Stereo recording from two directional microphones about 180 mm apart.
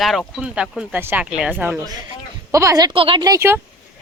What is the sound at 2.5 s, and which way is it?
A woman's voice, 15° right (ahead or behind).